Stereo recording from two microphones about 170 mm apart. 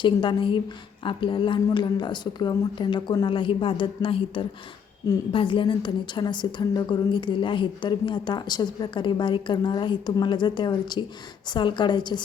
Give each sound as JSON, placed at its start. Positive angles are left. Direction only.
{"t": 0.0, "sound": "a woman's voice", "side_deg": 30}